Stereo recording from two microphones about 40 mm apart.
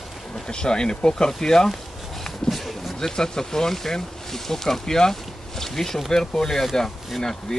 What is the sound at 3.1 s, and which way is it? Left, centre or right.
Speech, centre.